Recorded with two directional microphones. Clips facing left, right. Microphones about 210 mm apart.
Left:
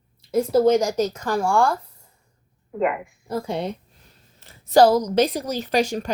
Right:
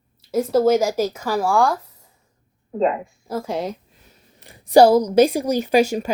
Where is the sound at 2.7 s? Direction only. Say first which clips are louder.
Right 3 dB; 30° right (ahead or behind).